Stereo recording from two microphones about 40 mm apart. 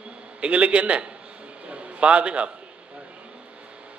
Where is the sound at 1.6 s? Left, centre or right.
Right.